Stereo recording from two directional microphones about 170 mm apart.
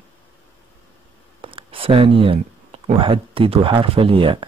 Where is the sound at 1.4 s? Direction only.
30° right (ahead or behind).